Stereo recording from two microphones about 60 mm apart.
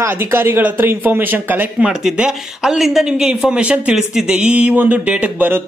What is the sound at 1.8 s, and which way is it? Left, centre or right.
Speech, centre.